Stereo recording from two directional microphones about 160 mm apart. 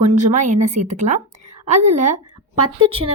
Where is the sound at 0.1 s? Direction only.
50° right (ahead or behind).